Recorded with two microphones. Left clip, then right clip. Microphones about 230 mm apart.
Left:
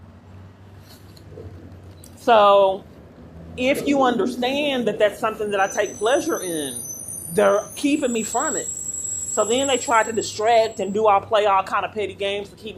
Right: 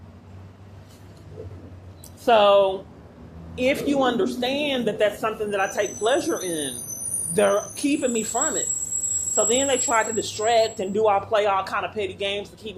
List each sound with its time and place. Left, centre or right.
2.2 s speech: centre